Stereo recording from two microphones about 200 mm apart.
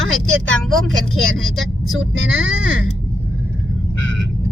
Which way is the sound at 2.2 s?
80° right.